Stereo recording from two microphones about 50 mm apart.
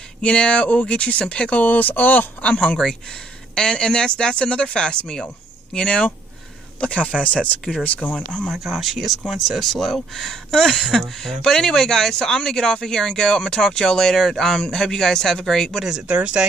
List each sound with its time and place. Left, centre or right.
0.2 s speech: left
1.6 s speech: left
2.4 s speech: left
6.8 s speech: left
8.5 s speech: centre
16.1 s speech: right